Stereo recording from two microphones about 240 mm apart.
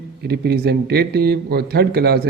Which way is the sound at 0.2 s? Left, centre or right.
Right.